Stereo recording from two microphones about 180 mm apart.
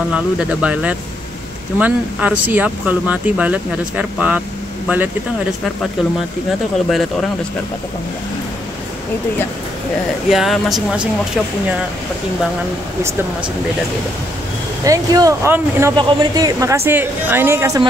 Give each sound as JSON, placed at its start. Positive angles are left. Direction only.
{"t": 0.1, "sound": "speech", "side_deg": -5}
{"t": 6.9, "sound": "speech", "side_deg": 0}
{"t": 10.3, "sound": "speech", "side_deg": 0}
{"t": 14.9, "sound": "speech", "side_deg": -20}
{"t": 16.0, "sound": "speech", "side_deg": -25}